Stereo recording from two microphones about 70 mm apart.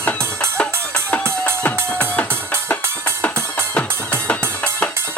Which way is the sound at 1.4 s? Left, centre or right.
Left.